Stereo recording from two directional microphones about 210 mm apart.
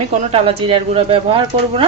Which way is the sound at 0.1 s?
30° right (ahead or behind).